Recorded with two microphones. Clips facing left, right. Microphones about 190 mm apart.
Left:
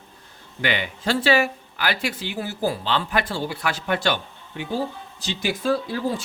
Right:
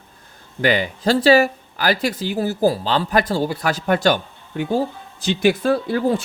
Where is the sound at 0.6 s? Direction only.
40° right (ahead or behind).